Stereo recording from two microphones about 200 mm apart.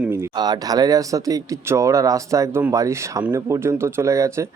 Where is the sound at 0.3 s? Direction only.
20° right (ahead or behind).